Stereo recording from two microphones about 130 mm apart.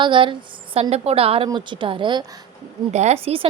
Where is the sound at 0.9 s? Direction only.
50° right (ahead or behind).